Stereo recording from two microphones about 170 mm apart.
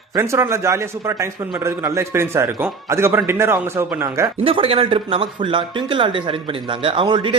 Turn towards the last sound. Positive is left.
turn(degrees=-30)  # may be behind; listen again after turning